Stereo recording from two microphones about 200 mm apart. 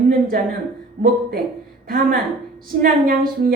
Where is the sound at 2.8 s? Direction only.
45° right (ahead or behind).